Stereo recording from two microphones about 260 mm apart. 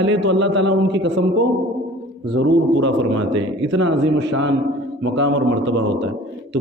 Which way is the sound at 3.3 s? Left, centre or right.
Right.